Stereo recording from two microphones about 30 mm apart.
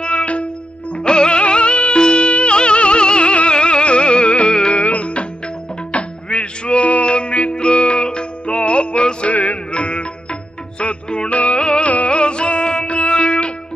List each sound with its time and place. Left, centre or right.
0.1 s music: left
0.9 s music: left
4.5 s music: left
4.7 s music: left
6.2 s music: left
9.3 s music: left
9.7 s music: left
11.2 s music: left
11.5 s music: left